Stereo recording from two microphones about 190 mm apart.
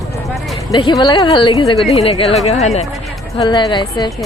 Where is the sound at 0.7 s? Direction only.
25° left (ahead or behind).